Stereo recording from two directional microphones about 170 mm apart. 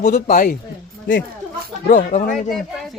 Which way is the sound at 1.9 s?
50° left (ahead or behind).